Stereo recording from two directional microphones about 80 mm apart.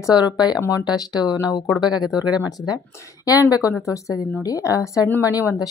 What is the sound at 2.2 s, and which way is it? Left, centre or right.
Speech, centre.